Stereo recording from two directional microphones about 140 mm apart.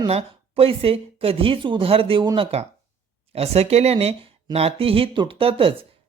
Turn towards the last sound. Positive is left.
turn(degrees=-40)  # may be behind; listen again after turning